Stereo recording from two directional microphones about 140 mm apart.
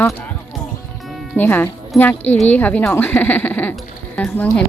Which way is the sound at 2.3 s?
10° left (ahead or behind).